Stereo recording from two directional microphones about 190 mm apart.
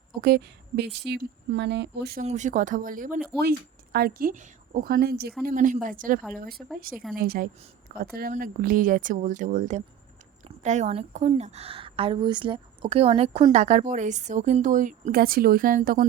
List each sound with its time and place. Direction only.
0.2 s speech: 55° right (ahead or behind)
2.2 s speech: 40° right (ahead or behind); by 5.3 s 55° right (ahead or behind)
5.5 s a woman's voice: 40° right (ahead or behind)